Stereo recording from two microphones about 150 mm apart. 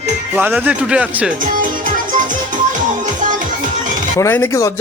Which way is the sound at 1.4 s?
65° right (ahead or behind).